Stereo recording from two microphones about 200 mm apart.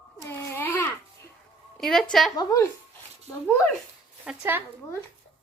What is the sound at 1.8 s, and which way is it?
Speech, centre (ahead or behind).